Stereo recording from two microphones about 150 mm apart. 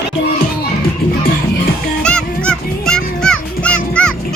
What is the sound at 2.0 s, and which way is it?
Music, 5° left (ahead or behind).